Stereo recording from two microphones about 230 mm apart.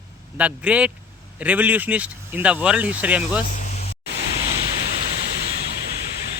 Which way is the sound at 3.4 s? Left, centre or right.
Left.